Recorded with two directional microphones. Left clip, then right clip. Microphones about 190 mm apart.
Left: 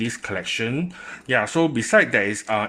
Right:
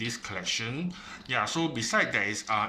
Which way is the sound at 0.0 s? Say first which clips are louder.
Left 6 dB; 45° left (ahead or behind).